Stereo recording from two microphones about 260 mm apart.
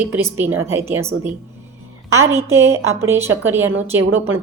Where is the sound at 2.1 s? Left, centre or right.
Centre.